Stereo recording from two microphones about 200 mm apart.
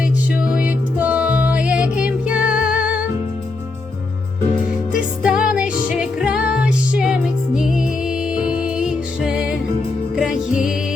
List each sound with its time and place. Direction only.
0.5 s music: 5° right (ahead or behind)
5.2 s music: 5° right (ahead or behind)